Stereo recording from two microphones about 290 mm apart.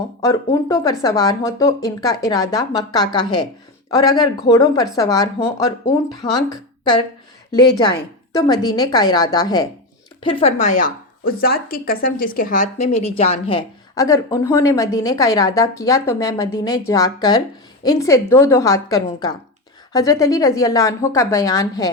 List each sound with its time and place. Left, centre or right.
0.2 s speech: centre
8.3 s speech: centre